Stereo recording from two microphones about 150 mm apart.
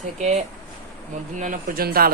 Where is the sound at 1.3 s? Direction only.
60° right (ahead or behind); by 2.1 s 75° right (ahead or behind).